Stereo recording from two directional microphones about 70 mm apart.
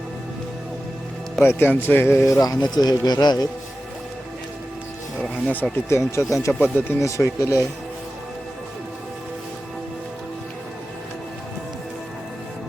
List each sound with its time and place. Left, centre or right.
1.4 s a man's voice: left
2.2 s speech: left
2.7 s speech: left
5.9 s speech: left
6.6 s speech: left
7.0 s speech: left